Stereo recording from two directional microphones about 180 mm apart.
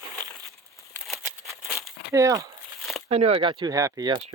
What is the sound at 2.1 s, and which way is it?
Speech, 20° right (ahead or behind).